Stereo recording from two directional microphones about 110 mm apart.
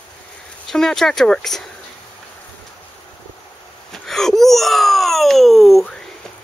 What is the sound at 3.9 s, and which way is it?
Wail, 5° left (ahead or behind).